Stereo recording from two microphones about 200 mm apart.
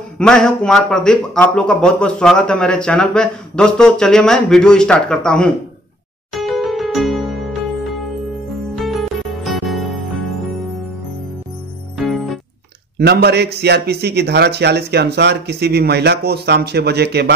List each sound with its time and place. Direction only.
0.2 s speech: 5° left (ahead or behind)
6.3 s music: centre (ahead or behind)
12.0 s music: centre (ahead or behind)
12.9 s speech: 50° right (ahead or behind)